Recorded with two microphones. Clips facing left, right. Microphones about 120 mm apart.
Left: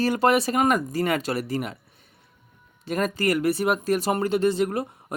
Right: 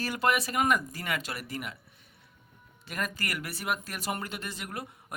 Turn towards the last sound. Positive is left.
turn(degrees=30)  # may be behind; listen again after turning